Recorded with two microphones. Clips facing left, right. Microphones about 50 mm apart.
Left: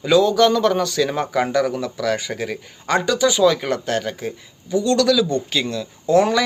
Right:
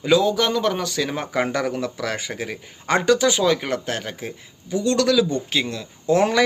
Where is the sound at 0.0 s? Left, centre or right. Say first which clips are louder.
Left 4 dB; centre.